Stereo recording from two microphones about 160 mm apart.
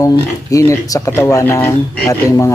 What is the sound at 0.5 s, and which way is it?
Speech, 20° left (ahead or behind).